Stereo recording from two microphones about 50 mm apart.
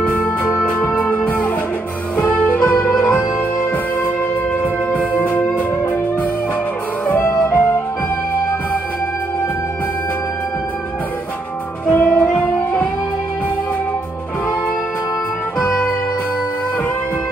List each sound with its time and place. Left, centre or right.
0.7 s music: left
4.9 s music: left
7.1 s music: left
7.4 s music: left
11.9 s music: left
15.6 s music: left